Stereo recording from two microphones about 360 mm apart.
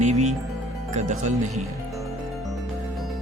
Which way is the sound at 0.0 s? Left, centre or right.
Centre.